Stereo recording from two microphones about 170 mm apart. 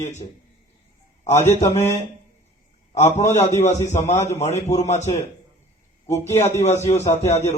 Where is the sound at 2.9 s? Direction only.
45° left (ahead or behind).